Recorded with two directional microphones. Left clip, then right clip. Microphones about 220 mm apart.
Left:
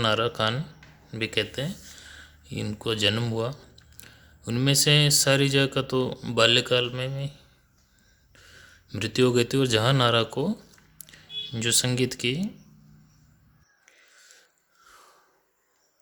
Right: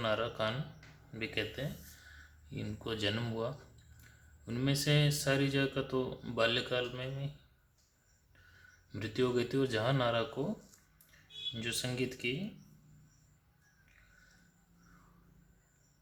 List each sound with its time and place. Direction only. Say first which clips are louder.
0.0 s speech: left 10 dB; 40° left (ahead or behind)
8.9 s speech: left 11 dB; 40° left (ahead or behind)
11.5 s speech: left 14 dB; 40° left (ahead or behind)